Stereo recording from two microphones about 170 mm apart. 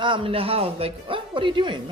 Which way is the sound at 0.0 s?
30° right (ahead or behind).